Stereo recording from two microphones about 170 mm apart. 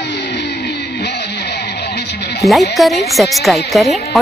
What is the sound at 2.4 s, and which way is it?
Speech, 20° left (ahead or behind).